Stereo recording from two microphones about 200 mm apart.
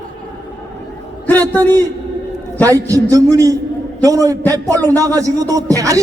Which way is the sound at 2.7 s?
15° right (ahead or behind).